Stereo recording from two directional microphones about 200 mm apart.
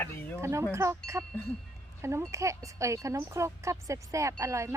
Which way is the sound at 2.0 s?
15° right (ahead or behind).